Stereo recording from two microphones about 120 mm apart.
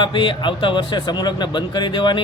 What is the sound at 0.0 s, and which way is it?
A man's voice, 45° left (ahead or behind).